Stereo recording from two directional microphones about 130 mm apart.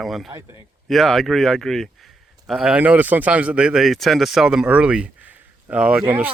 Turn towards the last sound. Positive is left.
turn(degrees=-10)  # may be behind; listen again after turning